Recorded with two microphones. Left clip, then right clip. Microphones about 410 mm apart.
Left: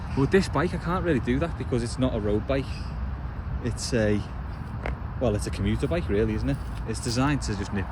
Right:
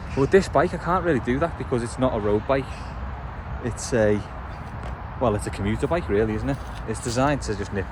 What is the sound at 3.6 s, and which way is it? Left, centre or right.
Speech, centre.